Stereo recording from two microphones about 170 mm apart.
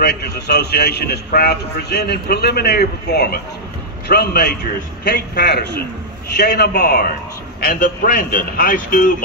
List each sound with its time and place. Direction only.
0.0 s a man's voice: 75° left (ahead or behind); by 9.1 s 55° left (ahead or behind)